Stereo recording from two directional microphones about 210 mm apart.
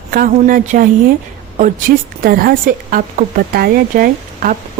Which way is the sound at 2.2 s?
45° right (ahead or behind).